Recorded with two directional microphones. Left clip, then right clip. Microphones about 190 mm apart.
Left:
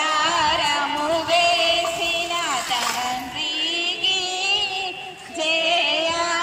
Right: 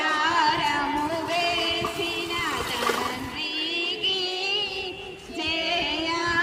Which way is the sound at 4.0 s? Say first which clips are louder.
Left 4 dB; 15° left (ahead or behind).